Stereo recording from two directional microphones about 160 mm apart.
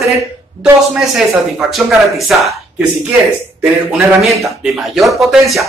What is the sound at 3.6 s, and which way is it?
A man's voice, 5° right (ahead or behind).